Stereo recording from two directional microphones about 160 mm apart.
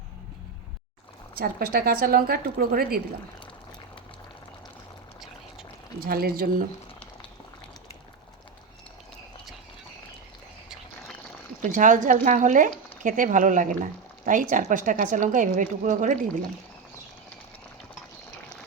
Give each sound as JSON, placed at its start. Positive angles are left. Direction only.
{"t": 1.4, "sound": "speech", "side_deg": -70}
{"t": 6.1, "sound": "speech", "side_deg": -70}
{"t": 11.6, "sound": "speech", "side_deg": -55}